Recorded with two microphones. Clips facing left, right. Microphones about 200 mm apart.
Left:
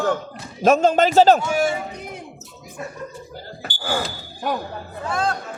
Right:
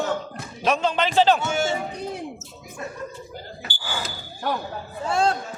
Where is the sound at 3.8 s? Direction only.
50° left (ahead or behind).